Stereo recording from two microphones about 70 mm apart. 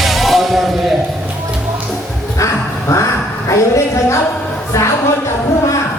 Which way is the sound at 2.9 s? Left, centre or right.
Left.